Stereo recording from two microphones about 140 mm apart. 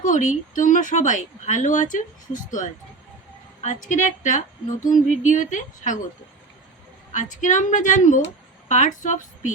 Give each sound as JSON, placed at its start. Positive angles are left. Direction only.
{"t": 0.0, "sound": "speech", "side_deg": 65}
{"t": 7.1, "sound": "speech", "side_deg": 65}